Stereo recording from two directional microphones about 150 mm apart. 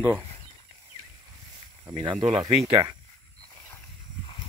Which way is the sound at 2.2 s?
50° right (ahead or behind).